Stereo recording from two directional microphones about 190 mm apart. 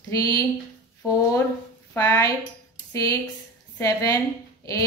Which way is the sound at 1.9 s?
15° left (ahead or behind).